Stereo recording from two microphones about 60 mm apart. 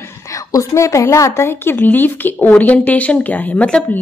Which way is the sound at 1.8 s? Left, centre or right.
Left.